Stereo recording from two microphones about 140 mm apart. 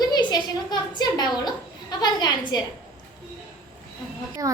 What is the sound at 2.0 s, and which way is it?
Speech, 30° left (ahead or behind).